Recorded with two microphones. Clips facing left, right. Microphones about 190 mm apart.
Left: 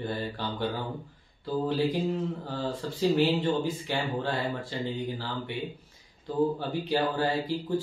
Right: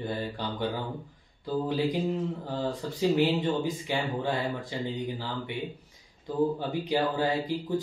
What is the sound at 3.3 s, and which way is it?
Speech, 15° right (ahead or behind).